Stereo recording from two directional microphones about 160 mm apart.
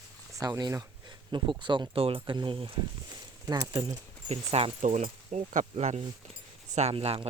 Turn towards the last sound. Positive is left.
turn(degrees=-40)  # may be behind; listen again after turning